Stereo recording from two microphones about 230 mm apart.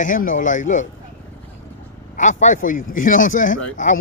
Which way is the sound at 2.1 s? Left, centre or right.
Left.